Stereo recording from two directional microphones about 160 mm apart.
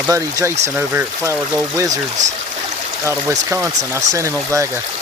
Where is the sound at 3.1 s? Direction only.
15° right (ahead or behind).